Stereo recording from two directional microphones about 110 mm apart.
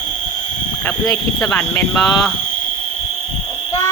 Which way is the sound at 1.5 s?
20° left (ahead or behind).